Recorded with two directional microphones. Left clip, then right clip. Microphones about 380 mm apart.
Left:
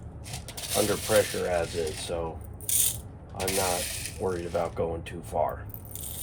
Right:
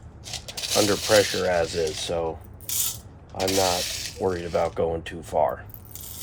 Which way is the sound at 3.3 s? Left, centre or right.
Right.